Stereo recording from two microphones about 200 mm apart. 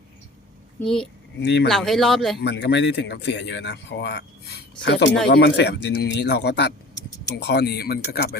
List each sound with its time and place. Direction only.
1.4 s speech: 60° left (ahead or behind)
1.7 s speech: centre (ahead or behind)
2.4 s speech: 60° left (ahead or behind)